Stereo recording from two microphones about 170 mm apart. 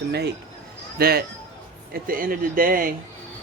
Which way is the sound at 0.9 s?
65° right (ahead or behind).